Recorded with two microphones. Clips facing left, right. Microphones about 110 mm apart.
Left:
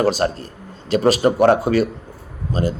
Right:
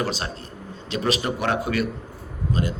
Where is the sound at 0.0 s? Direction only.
45° left (ahead or behind).